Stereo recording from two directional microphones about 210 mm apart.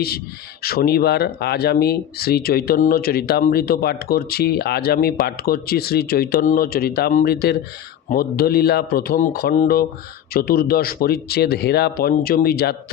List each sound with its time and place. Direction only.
0.6 s speech: 45° left (ahead or behind)